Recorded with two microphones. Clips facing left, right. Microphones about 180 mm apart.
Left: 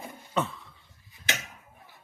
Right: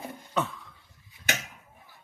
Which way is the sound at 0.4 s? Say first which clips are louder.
Even; 10° left (ahead or behind).